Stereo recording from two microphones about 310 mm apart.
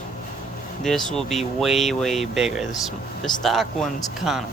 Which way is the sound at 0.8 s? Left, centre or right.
Centre.